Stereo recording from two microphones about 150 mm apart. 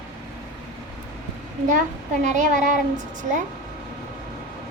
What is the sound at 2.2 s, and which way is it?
A child's voice, 55° right (ahead or behind).